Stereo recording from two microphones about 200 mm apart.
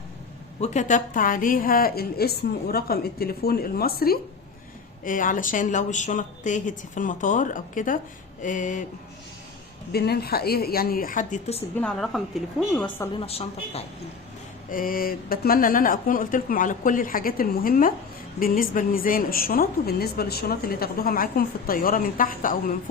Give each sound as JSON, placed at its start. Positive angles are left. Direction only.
{"t": 0.6, "sound": "a woman's voice", "side_deg": 35}
{"t": 9.9, "sound": "a woman's voice", "side_deg": 50}
{"t": 11.8, "sound": "a woman's voice", "side_deg": 5}
{"t": 12.8, "sound": "a woman's voice", "side_deg": 25}
{"t": 14.7, "sound": "a woman's voice", "side_deg": 45}